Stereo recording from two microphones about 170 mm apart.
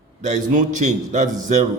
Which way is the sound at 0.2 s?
45° right (ahead or behind).